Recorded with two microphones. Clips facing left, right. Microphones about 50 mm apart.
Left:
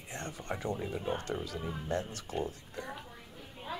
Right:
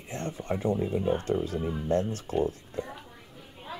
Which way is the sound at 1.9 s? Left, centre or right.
Right.